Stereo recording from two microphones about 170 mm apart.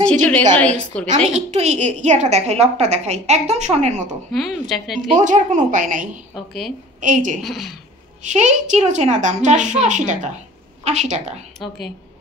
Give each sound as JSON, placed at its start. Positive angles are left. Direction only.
{"t": 0.0, "sound": "a woman's voice", "side_deg": 10}
{"t": 1.0, "sound": "a woman's voice", "side_deg": -45}
{"t": 4.3, "sound": "a woman's voice", "side_deg": 0}
{"t": 5.1, "sound": "a woman's voice", "side_deg": -45}
{"t": 6.3, "sound": "a woman's voice", "side_deg": 0}
{"t": 7.0, "sound": "a woman's voice", "side_deg": -50}
{"t": 7.4, "sound": "a woman's voice", "side_deg": 0}
{"t": 8.2, "sound": "a woman's voice", "side_deg": -45}